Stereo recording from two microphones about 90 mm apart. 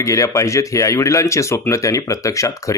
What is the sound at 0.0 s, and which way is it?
Speech, 35° left (ahead or behind).